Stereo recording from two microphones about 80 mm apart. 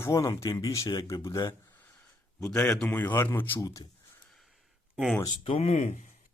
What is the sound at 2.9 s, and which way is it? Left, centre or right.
Speech, left.